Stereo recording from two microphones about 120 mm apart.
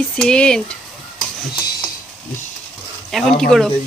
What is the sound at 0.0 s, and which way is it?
Speech, 5° left (ahead or behind).